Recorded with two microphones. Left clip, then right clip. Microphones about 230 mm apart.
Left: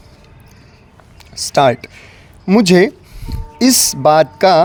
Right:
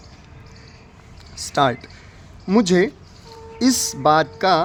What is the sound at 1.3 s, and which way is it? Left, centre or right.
Speech, left.